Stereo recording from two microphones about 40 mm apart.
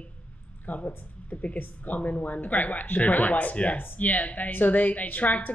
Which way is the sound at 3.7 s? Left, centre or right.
Left.